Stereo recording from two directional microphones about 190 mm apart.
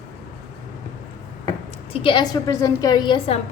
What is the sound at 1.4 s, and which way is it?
A woman's voice, 25° left (ahead or behind).